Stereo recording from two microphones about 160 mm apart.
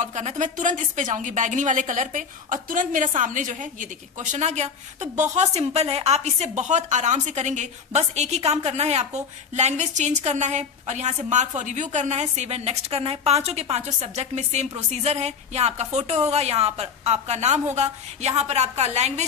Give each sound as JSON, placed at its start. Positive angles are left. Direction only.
{"t": 0.0, "sound": "a woman's voice", "side_deg": -45}